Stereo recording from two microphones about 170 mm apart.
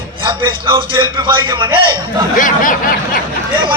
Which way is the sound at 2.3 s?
50° left (ahead or behind).